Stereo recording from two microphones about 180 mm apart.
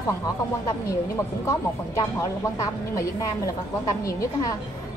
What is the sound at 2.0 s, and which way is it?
A woman's voice, 20° left (ahead or behind).